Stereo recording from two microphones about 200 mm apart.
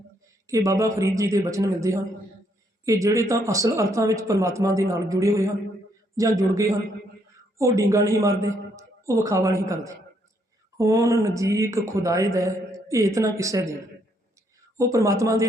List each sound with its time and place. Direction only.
0.4 s a man's voice: 15° right (ahead or behind)
14.8 s a man's voice: 15° right (ahead or behind)